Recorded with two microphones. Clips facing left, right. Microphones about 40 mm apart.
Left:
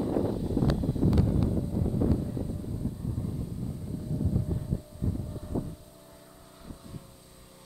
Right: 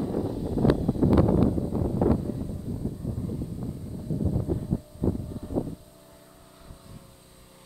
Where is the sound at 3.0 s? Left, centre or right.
Centre.